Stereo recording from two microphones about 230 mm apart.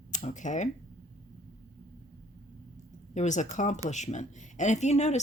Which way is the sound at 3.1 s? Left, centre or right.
Left.